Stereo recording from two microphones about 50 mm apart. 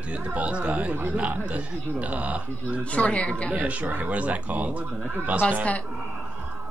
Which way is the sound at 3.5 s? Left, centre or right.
Right.